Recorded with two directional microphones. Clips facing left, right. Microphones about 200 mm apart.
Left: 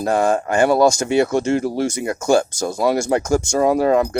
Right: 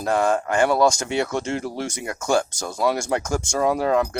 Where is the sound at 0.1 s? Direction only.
40° left (ahead or behind).